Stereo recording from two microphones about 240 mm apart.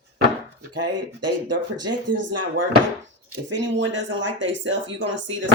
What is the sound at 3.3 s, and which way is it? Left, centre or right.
Speech, right.